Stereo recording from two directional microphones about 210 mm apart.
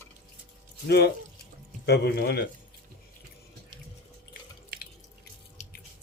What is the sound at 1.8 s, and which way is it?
Speech, 50° left (ahead or behind).